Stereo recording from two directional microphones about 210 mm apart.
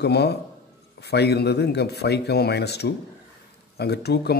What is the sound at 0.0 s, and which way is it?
Speech, 50° left (ahead or behind).